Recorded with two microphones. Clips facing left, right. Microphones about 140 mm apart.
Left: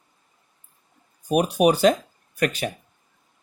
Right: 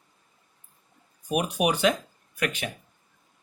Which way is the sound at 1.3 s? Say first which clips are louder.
Left 6 dB; 35° left (ahead or behind).